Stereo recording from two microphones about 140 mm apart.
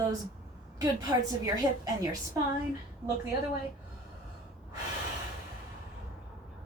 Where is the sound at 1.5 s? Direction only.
25° right (ahead or behind).